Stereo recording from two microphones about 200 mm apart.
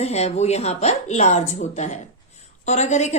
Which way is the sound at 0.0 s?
30° left (ahead or behind).